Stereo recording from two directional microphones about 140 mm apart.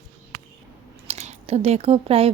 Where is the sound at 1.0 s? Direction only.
50° right (ahead or behind).